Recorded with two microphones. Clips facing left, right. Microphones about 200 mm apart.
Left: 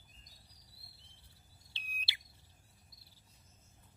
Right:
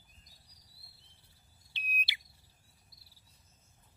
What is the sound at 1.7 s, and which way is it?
Bird, 20° right (ahead or behind).